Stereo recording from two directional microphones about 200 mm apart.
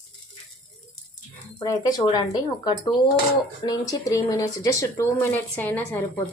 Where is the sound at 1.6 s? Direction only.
20° left (ahead or behind).